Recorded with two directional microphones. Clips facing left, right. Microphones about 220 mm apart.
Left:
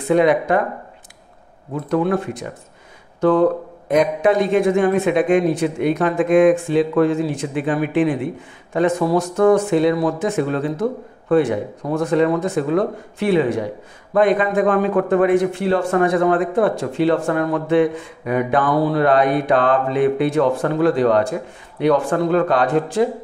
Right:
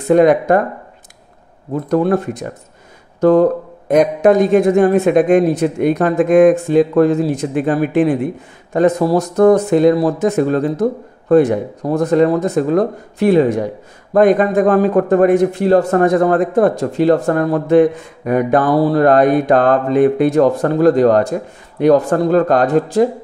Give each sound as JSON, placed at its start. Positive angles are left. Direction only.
{"t": 0.1, "sound": "speech", "side_deg": -45}
{"t": 1.9, "sound": "a man's voice", "side_deg": -40}